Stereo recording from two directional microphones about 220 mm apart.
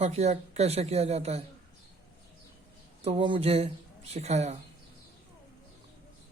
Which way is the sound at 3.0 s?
25° right (ahead or behind).